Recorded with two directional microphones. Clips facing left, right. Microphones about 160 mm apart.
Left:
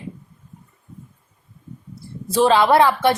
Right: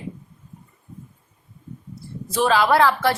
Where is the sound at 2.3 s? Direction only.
25° left (ahead or behind).